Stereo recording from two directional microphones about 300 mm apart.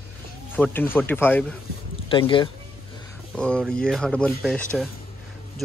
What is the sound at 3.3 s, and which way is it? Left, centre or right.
Speech, centre.